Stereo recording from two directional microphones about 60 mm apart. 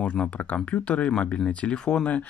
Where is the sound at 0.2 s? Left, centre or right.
Left.